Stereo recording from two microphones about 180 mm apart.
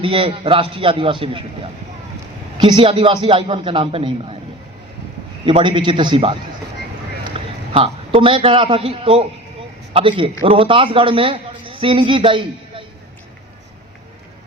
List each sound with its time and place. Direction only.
0.0 s a man's voice: 30° right (ahead or behind)
2.6 s a man's voice: 25° right (ahead or behind)
5.5 s a man's voice: 30° right (ahead or behind)